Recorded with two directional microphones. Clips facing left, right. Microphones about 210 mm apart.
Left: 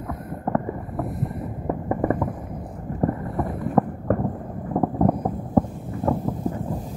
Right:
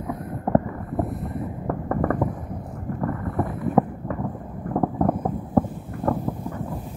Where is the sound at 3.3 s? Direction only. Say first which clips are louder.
Right 2 dB; centre (ahead or behind).